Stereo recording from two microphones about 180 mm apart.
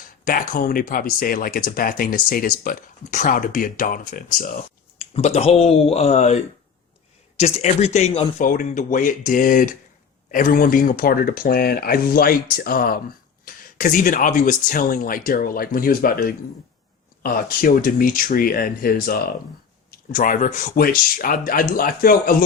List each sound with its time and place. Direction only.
0.3 s speech: 50° left (ahead or behind)
4.9 s speech: 35° left (ahead or behind)
7.3 s speech: 35° left (ahead or behind); by 22.4 s 55° left (ahead or behind)